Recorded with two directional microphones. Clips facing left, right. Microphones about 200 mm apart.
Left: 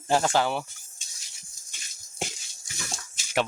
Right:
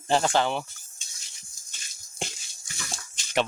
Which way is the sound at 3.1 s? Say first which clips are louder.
Right 1 dB; 5° left (ahead or behind).